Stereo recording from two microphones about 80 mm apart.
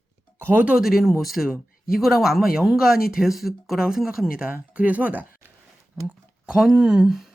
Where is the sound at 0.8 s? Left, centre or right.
Centre.